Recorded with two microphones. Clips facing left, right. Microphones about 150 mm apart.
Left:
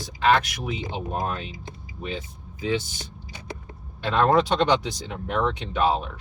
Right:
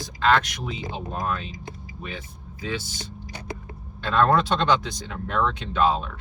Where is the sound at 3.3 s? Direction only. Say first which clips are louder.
Right 2 dB; 65° right (ahead or behind).